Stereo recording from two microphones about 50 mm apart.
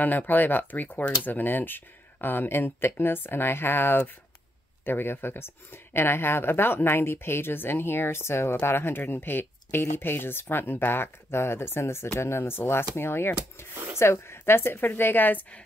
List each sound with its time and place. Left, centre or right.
0.0 s speech: left